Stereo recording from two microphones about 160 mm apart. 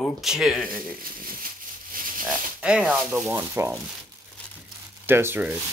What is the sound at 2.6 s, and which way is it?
Speech, 5° right (ahead or behind).